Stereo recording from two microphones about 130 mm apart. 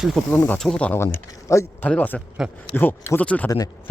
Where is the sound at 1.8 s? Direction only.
10° left (ahead or behind).